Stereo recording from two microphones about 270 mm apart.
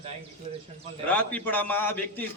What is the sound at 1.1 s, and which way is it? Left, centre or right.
A man's voice, centre.